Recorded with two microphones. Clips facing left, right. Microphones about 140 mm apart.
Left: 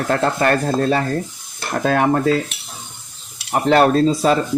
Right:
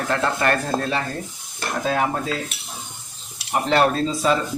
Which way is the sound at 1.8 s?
60° left (ahead or behind).